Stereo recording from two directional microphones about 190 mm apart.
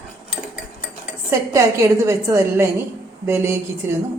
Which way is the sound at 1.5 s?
15° right (ahead or behind).